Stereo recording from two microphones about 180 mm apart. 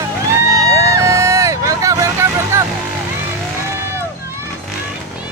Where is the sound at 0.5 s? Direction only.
15° right (ahead or behind).